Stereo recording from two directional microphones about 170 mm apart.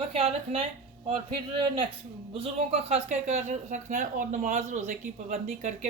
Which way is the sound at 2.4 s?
35° right (ahead or behind).